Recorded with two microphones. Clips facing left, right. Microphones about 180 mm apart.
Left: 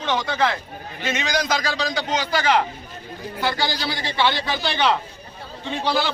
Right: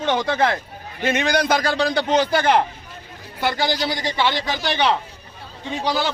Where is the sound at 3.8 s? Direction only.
20° right (ahead or behind).